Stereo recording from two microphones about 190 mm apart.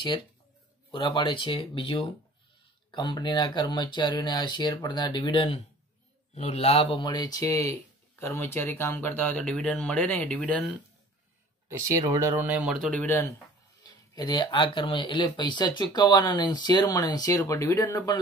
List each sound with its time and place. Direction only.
0.9 s speech: 25° left (ahead or behind); by 10.5 s 5° left (ahead or behind)
11.7 s speech: 15° right (ahead or behind); by 13.3 s 10° left (ahead or behind)
13.8 s speech: 20° left (ahead or behind)